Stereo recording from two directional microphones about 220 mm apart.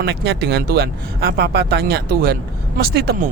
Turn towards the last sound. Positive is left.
turn(degrees=-45)  # may be behind; listen again after turning